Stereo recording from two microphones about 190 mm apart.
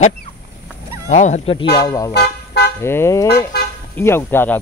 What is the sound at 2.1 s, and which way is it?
Car alarm, 60° left (ahead or behind).